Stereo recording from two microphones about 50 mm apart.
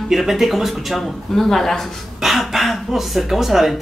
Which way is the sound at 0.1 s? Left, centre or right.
Centre.